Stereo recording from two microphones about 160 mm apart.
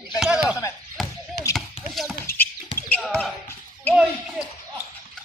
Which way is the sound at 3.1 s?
10° left (ahead or behind).